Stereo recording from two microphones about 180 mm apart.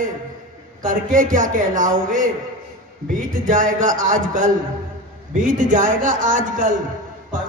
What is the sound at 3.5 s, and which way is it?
A man's voice, 45° right (ahead or behind).